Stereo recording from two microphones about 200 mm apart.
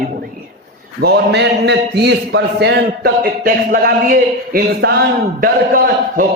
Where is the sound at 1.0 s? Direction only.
55° right (ahead or behind).